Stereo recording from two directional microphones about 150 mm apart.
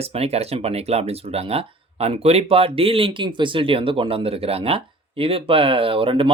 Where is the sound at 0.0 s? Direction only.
40° right (ahead or behind).